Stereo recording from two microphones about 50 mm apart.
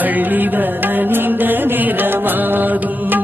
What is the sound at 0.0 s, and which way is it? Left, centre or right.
Music, right.